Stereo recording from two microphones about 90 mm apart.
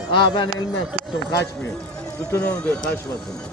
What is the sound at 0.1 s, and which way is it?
Speech, 55° left (ahead or behind).